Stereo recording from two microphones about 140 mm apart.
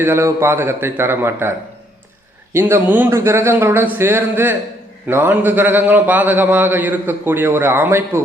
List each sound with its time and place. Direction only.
0.0 s a man's voice: 15° right (ahead or behind)